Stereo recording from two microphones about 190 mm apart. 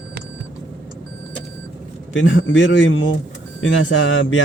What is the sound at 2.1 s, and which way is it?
A man's voice, 75° left (ahead or behind).